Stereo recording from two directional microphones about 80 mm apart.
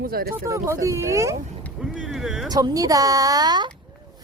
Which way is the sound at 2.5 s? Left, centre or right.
Right.